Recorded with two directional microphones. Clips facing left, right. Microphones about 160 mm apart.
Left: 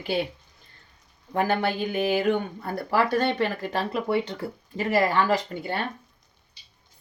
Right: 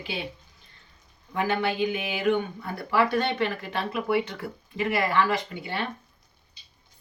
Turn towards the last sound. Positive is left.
turn(degrees=40)  # may be behind; listen again after turning